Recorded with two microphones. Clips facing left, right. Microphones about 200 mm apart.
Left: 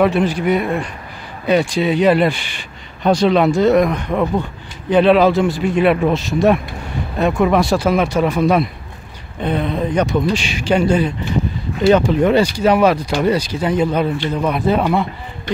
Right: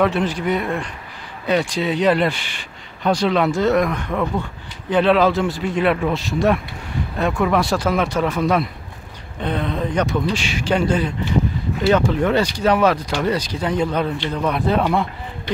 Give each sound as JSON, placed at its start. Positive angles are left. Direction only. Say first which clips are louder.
{"t": 0.0, "sound": "speech", "louder": "left 4 dB", "side_deg": 10}